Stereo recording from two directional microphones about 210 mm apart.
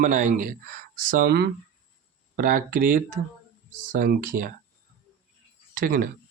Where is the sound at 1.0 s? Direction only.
50° right (ahead or behind).